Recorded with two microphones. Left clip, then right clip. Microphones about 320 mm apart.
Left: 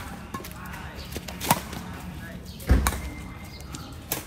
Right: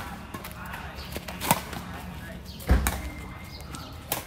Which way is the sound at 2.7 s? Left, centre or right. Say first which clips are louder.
Left 1 dB; right.